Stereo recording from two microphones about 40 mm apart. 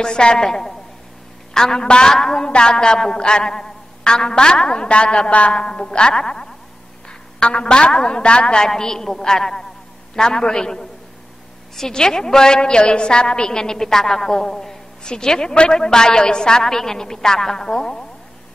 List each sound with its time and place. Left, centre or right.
0.0 s a woman's voice: left
5.6 s a woman's voice: centre
8.6 s a woman's voice: centre